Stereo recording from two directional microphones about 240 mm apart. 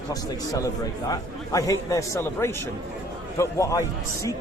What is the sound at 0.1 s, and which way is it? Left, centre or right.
A man's voice, centre.